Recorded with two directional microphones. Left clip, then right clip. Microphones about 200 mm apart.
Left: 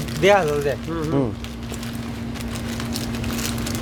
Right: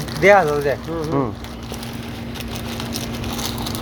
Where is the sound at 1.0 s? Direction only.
15° left (ahead or behind).